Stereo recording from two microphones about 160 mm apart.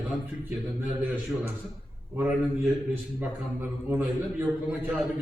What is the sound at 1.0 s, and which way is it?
Speech, 10° right (ahead or behind).